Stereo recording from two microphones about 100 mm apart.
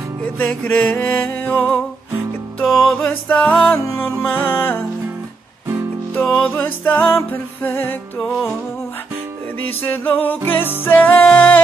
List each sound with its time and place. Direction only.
0.4 s music: 15° left (ahead or behind)
2.6 s music: centre (ahead or behind)
3.8 s music: 25° left (ahead or behind)
6.2 s music: 5° left (ahead or behind)
6.5 s music: 20° left (ahead or behind)
8.2 s music: centre (ahead or behind)
9.8 s music: 20° left (ahead or behind)